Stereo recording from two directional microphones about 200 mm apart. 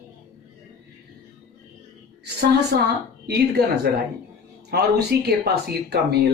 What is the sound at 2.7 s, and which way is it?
Speech, 55° right (ahead or behind).